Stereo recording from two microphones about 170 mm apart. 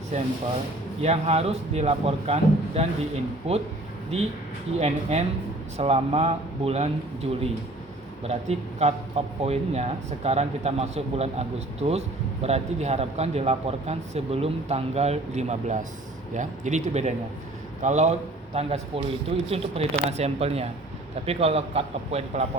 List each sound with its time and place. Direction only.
1.0 s a man's voice: 40° right (ahead or behind)
4.8 s a man's voice: 40° right (ahead or behind)